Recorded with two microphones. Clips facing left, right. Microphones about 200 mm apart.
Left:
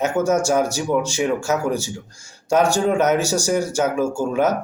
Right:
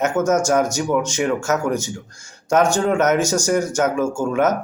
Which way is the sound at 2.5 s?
35° left (ahead or behind).